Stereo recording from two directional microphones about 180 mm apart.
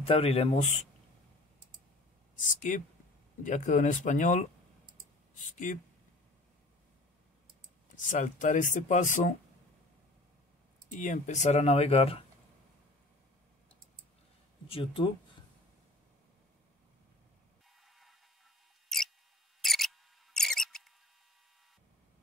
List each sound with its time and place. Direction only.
0.0 s speech: 30° left (ahead or behind)
2.3 s speech: 45° left (ahead or behind)
7.9 s speech: 45° left (ahead or behind)
11.0 s speech: 40° left (ahead or behind)
14.7 s speech: 30° left (ahead or behind)
17.8 s a sound: centre (ahead or behind)
18.9 s mouse: centre (ahead or behind)
19.6 s a sound: centre (ahead or behind)